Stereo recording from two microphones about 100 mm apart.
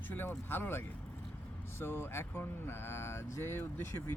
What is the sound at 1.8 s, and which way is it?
Speech, 25° left (ahead or behind).